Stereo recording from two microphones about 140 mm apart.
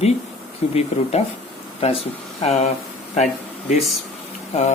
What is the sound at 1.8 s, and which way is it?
Speech, 45° left (ahead or behind).